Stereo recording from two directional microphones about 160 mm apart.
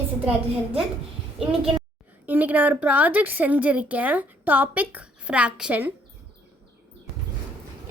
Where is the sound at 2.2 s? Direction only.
10° right (ahead or behind).